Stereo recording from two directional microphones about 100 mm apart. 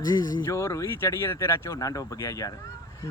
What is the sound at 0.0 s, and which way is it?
Speech, 40° left (ahead or behind).